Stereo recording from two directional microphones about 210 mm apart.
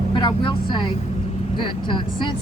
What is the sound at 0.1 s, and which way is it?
Speech, 20° left (ahead or behind).